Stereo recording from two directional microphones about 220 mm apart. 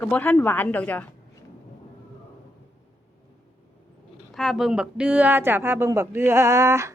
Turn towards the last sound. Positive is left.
turn(degrees=-15)  # may be behind; listen again after turning